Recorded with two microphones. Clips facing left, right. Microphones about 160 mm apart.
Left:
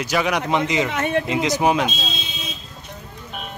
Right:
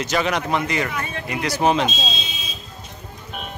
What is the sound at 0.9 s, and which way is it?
Speech, 75° left (ahead or behind).